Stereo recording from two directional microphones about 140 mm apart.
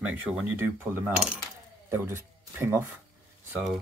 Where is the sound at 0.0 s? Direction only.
5° right (ahead or behind).